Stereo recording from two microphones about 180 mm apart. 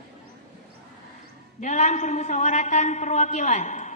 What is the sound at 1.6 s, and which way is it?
A woman's voice, 40° left (ahead or behind).